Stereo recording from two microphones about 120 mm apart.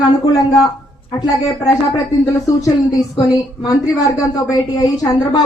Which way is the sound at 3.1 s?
30° left (ahead or behind).